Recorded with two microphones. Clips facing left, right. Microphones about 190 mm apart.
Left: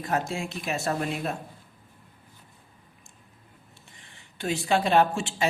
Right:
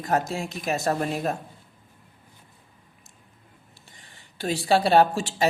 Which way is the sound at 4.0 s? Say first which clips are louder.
Right 2 dB; 35° right (ahead or behind).